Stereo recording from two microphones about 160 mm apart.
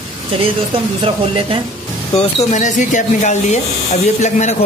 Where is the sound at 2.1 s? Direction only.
45° left (ahead or behind).